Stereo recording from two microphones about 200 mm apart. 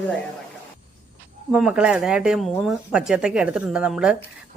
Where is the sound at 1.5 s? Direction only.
5° right (ahead or behind).